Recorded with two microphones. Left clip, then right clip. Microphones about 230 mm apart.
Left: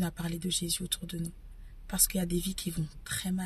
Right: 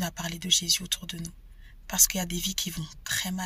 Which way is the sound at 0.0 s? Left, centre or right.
Centre.